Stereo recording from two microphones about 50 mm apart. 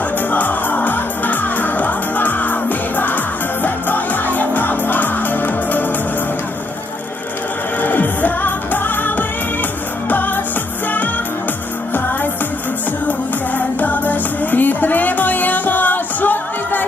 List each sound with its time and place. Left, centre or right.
0.3 s music: left
7.8 s music: left
13.6 s music: left